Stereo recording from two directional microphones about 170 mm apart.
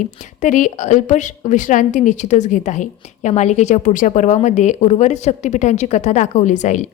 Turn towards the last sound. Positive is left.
turn(degrees=45)  # may be behind; listen again after turning